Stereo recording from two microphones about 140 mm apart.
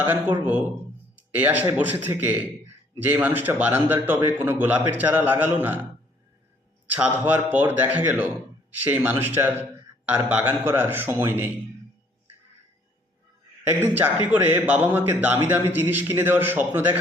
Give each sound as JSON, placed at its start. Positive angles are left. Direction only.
{"t": 0.1, "sound": "a man's voice", "side_deg": -15}
{"t": 1.1, "sound": "a sound", "side_deg": -10}
{"t": 1.7, "sound": "a man's voice", "side_deg": -10}
{"t": 6.8, "sound": "a man's voice", "side_deg": -10}
{"t": 14.3, "sound": "a man's voice", "side_deg": -10}